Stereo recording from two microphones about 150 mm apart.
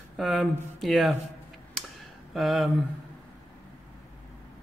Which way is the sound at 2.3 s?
Centre (ahead or behind).